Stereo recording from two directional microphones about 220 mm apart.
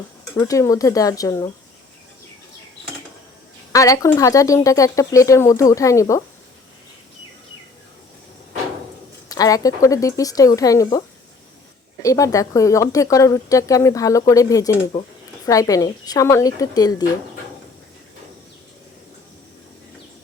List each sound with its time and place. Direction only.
0.3 s speech: 15° left (ahead or behind)
3.7 s speech: 15° left (ahead or behind)
9.3 s speech: 15° left (ahead or behind)
12.0 s speech: 15° left (ahead or behind)